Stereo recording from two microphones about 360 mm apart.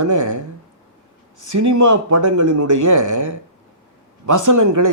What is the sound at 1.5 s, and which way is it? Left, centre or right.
A man's voice, right.